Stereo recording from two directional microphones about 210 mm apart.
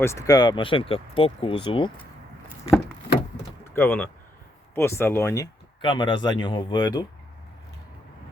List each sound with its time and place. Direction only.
0.0 s speech: 15° left (ahead or behind)
3.6 s speech: 10° left (ahead or behind)